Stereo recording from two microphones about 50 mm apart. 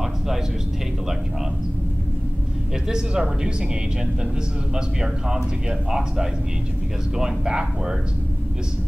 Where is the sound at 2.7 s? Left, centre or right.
Centre.